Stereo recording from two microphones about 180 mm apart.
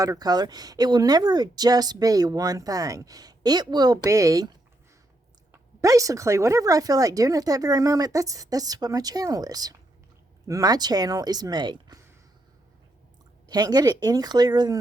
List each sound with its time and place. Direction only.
0.0 s speech: 20° right (ahead or behind)
5.8 s speech: 20° right (ahead or behind)
13.5 s speech: 20° right (ahead or behind)